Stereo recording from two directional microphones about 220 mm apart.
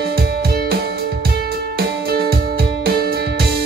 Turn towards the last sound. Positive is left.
turn(degrees=-45)  # may be behind; listen again after turning